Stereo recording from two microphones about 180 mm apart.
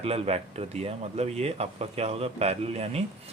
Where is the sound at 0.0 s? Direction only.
35° right (ahead or behind).